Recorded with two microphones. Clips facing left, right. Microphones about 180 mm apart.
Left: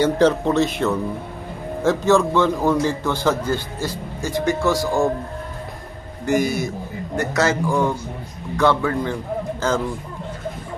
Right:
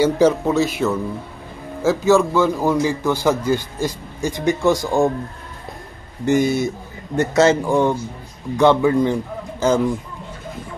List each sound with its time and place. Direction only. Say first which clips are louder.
0.0 s a man's voice: right 1 dB; 5° right (ahead or behind)
6.2 s a man's voice: right 3 dB; 25° right (ahead or behind)